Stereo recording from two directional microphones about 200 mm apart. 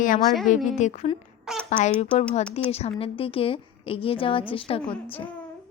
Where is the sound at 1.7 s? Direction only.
35° left (ahead or behind).